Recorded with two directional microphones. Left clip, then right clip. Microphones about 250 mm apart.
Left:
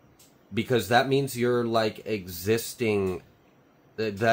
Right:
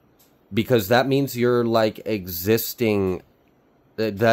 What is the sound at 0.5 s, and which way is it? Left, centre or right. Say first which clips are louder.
Speech: right 4 dB; right.